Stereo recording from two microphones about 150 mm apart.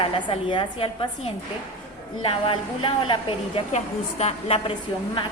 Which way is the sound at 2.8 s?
35° left (ahead or behind).